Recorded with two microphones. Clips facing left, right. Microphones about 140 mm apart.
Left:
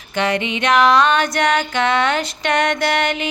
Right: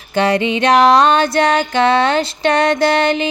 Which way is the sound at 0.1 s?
35° right (ahead or behind).